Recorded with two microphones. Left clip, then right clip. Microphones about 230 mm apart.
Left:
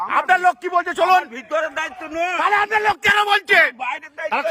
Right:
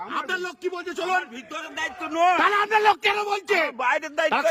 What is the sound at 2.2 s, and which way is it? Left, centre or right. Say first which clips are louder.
Speech: right 1 dB; centre.